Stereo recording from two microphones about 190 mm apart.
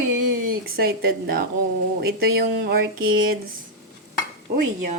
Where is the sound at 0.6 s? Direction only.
55° right (ahead or behind).